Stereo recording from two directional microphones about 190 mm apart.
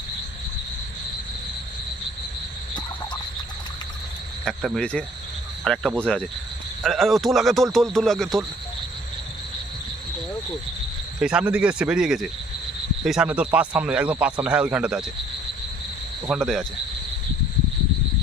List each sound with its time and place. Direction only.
4.4 s a man's voice: centre (ahead or behind)
11.2 s a man's voice: 5° right (ahead or behind)
16.3 s a man's voice: centre (ahead or behind)